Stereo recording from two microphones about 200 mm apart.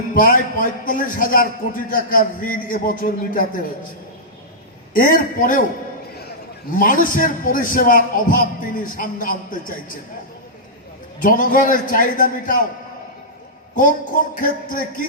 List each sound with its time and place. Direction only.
0.1 s a man's voice: 45° left (ahead or behind)
4.9 s a man's voice: 45° left (ahead or behind)
6.7 s a man's voice: 45° left (ahead or behind)
11.2 s a man's voice: 45° left (ahead or behind)
13.7 s a man's voice: 45° left (ahead or behind)